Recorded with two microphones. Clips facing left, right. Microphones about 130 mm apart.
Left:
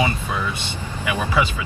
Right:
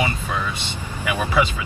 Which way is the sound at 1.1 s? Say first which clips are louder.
Right 1 dB; 15° right (ahead or behind).